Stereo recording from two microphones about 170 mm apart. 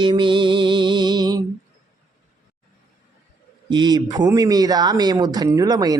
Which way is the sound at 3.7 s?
25° right (ahead or behind).